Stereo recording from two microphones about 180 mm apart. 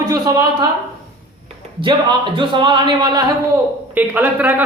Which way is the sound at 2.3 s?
25° right (ahead or behind).